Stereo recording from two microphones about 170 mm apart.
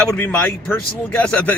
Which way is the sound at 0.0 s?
5° left (ahead or behind).